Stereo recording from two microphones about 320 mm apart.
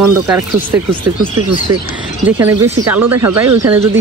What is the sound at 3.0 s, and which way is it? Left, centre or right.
Speech, right.